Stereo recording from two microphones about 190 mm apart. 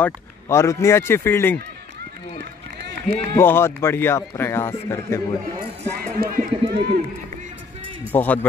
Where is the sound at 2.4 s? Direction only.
60° right (ahead or behind).